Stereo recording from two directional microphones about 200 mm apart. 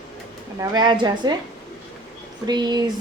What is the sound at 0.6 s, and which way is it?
Speech, 20° right (ahead or behind).